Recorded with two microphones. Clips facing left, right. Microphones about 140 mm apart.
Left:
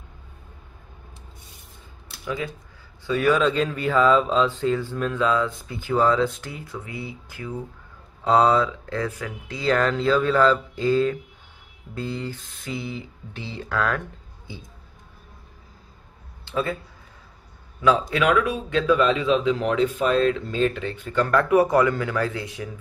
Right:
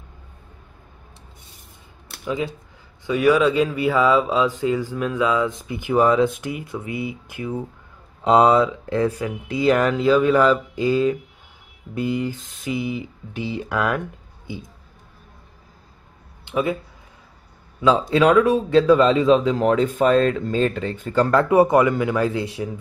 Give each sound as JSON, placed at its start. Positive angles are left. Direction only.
{"t": 2.2, "sound": "speech", "side_deg": -20}
{"t": 16.4, "sound": "a sound", "side_deg": -15}
{"t": 17.8, "sound": "speech", "side_deg": -30}